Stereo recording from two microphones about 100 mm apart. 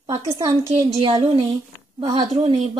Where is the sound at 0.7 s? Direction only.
85° right.